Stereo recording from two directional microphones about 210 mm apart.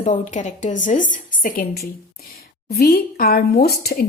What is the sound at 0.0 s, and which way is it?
A woman's voice, 35° left (ahead or behind).